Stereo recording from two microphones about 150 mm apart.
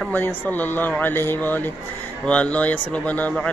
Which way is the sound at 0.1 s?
10° left (ahead or behind).